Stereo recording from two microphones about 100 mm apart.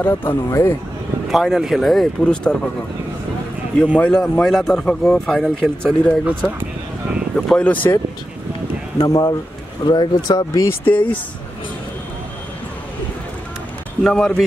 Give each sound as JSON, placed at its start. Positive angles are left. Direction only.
{"t": 0.0, "sound": "speech", "side_deg": 25}
{"t": 1.3, "sound": "speech", "side_deg": -5}
{"t": 3.8, "sound": "speech", "side_deg": 15}
{"t": 7.3, "sound": "speech", "side_deg": 10}
{"t": 8.9, "sound": "speech", "side_deg": 30}
{"t": 9.8, "sound": "speech", "side_deg": 45}
{"t": 10.9, "sound": "speech", "side_deg": 20}
{"t": 14.0, "sound": "speech", "side_deg": 5}